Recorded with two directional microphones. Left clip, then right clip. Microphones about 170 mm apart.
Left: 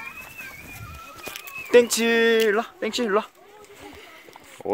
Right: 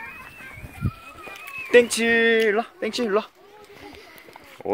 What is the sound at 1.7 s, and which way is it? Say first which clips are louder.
Speech: even; 15° left (ahead or behind).